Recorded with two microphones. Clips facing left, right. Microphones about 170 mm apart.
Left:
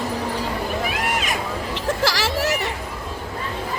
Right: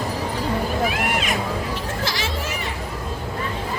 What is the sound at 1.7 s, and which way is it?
Hubbub, 85° left.